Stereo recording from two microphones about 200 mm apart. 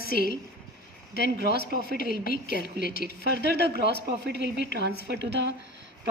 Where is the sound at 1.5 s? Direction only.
45° left (ahead or behind).